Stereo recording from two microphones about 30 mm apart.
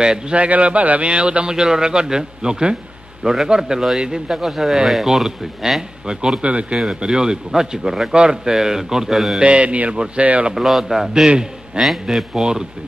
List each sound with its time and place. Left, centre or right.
0.0 s a man's voice: right
0.4 s a man's voice: right
1.0 s a man's voice: right
4.3 s speech: centre
7.0 s a man's voice: right
9.1 s speech: centre
9.4 s a man's voice: right
10.1 s a man's voice: right
10.5 s speech: centre
11.2 s a man's voice: right
11.8 s speech: centre